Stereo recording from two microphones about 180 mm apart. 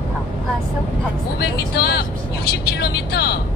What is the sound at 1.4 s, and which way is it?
Speech, 60° left (ahead or behind).